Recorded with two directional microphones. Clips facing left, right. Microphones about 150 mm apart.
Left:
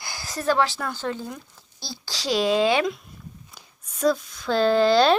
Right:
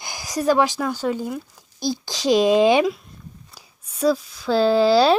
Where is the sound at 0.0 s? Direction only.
15° right (ahead or behind).